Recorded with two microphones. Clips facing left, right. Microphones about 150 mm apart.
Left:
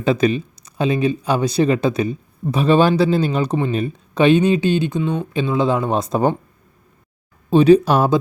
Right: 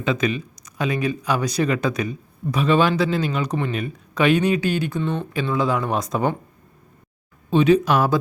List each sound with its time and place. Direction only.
0.0 s speech: 35° left (ahead or behind)
7.5 s speech: 35° left (ahead or behind)